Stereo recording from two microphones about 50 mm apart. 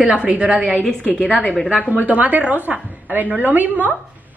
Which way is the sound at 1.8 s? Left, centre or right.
Right.